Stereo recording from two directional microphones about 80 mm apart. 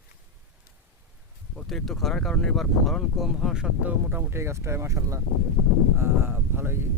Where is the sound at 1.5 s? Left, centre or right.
Centre.